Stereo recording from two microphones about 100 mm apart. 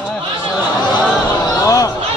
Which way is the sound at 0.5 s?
5° left (ahead or behind).